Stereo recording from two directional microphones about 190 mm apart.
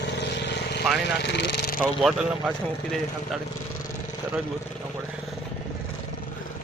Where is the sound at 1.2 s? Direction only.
65° left (ahead or behind).